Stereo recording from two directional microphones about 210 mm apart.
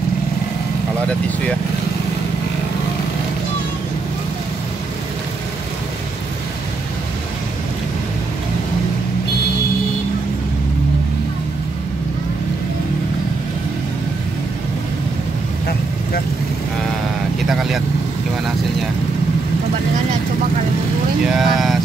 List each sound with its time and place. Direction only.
17.5 s vehicle: centre (ahead or behind)
21.4 s vehicle: centre (ahead or behind)